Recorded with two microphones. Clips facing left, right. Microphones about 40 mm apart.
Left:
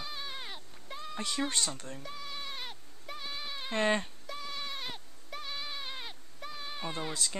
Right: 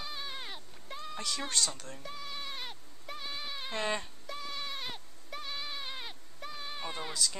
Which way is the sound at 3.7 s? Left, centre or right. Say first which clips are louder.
Left 5 dB; left.